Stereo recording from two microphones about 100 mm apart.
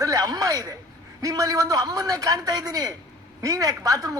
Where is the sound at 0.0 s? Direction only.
35° right (ahead or behind).